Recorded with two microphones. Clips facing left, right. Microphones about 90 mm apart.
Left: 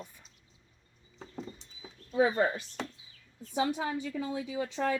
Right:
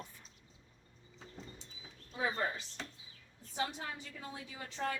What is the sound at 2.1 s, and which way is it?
Speech, 75° left (ahead or behind).